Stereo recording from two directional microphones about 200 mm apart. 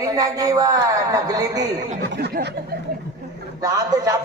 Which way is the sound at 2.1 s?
55° right (ahead or behind).